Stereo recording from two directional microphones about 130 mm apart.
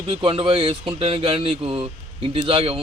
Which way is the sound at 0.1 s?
45° right (ahead or behind).